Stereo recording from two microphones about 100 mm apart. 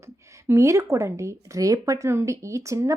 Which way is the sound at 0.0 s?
30° right (ahead or behind).